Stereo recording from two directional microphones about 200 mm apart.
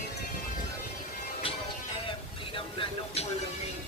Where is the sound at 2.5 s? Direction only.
25° left (ahead or behind).